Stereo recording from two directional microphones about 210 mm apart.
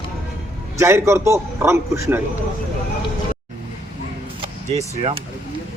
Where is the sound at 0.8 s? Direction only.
10° right (ahead or behind).